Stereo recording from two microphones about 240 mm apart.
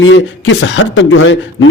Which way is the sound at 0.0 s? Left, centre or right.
Left.